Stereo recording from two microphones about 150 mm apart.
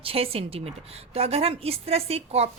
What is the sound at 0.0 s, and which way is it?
Speech, 40° right (ahead or behind).